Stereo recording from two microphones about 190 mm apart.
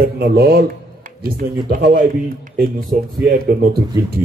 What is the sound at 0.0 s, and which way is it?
Speech, 55° right (ahead or behind).